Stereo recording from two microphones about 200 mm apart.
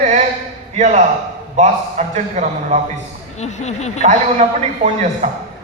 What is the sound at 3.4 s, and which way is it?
Speech, 35° left (ahead or behind).